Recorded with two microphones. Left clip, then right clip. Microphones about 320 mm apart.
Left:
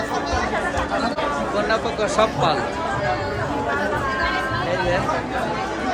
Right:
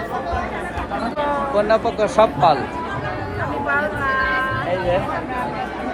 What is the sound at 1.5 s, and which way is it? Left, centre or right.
Speech, centre.